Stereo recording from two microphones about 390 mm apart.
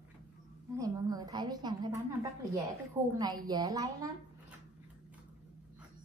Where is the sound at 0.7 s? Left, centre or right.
Centre.